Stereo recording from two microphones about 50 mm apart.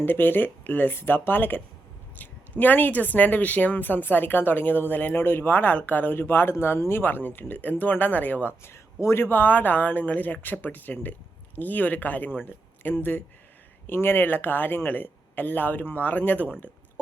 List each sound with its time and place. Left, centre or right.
0.0 s speech: left
8.6 s speech: left
9.3 s speech: left